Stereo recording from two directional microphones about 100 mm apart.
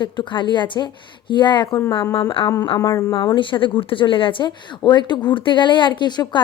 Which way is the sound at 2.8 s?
35° left (ahead or behind).